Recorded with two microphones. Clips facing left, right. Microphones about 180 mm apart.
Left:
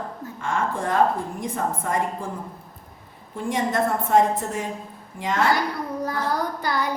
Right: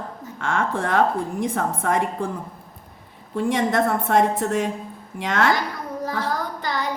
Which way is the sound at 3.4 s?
70° right (ahead or behind).